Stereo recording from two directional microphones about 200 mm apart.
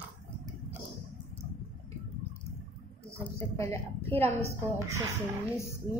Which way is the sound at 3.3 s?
15° left (ahead or behind).